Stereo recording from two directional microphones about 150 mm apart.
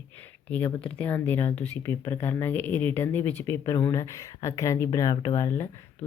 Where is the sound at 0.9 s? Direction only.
10° left (ahead or behind).